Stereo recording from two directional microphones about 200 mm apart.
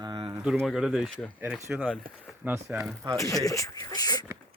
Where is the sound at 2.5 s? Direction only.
10° right (ahead or behind).